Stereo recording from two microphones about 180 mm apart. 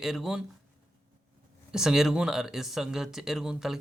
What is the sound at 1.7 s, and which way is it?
Speech, 5° right (ahead or behind).